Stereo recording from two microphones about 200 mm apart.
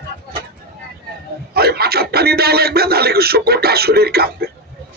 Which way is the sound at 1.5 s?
50° right (ahead or behind).